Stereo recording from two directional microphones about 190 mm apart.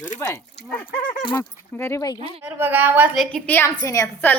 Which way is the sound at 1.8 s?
15° left (ahead or behind).